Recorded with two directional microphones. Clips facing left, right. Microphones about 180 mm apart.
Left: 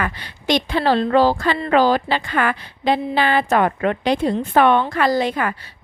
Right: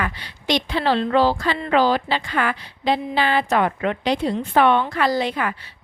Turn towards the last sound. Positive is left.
turn(degrees=45)  # may be behind; listen again after turning